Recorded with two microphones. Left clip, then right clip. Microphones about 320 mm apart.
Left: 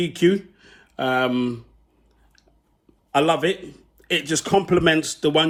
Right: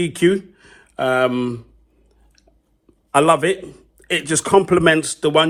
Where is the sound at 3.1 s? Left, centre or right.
Centre.